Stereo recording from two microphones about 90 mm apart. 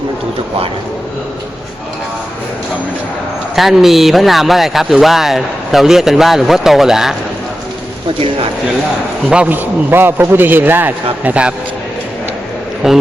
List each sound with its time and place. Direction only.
3.5 s a man's voice: 5° right (ahead or behind)
9.3 s a man's voice: 15° right (ahead or behind)
12.8 s a man's voice: 5° right (ahead or behind)